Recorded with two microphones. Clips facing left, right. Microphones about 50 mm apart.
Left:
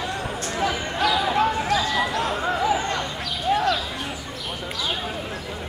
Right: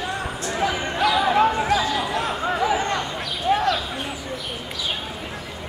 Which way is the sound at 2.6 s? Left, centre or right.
Right.